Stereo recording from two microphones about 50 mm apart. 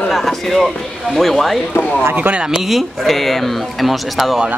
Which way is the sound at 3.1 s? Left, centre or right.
Centre.